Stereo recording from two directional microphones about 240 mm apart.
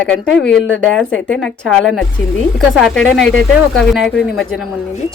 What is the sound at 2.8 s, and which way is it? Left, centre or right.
Speech, centre.